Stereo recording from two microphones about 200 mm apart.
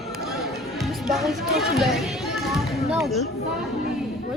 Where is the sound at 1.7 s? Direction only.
Centre (ahead or behind).